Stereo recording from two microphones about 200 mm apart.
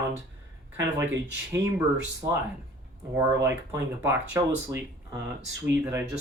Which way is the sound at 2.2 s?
15° right (ahead or behind).